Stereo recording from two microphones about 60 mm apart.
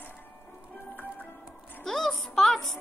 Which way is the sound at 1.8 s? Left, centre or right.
Centre.